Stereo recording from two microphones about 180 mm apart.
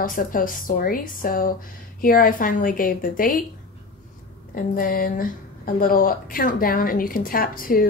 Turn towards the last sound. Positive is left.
turn(degrees=50)  # may be behind; listen again after turning